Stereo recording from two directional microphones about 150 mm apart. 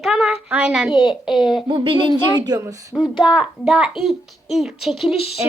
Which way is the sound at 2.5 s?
20° right (ahead or behind).